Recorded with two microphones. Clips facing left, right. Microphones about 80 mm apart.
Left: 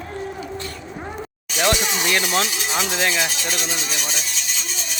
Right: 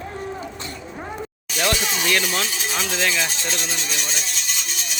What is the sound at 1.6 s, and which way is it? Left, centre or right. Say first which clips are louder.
Speech: left 2 dB; centre.